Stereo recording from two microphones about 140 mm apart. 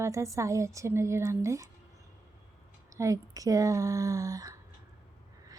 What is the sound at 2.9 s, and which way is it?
A woman's voice, 25° right (ahead or behind).